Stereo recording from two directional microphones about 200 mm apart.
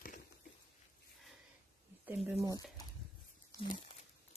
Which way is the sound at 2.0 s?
5° right (ahead or behind).